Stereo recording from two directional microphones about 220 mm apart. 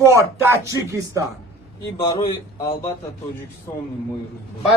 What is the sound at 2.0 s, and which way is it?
Speech, 25° left (ahead or behind).